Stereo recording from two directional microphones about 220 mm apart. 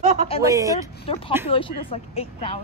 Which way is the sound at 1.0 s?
25° left (ahead or behind).